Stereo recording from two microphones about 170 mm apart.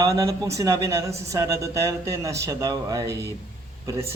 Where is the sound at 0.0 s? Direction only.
20° right (ahead or behind).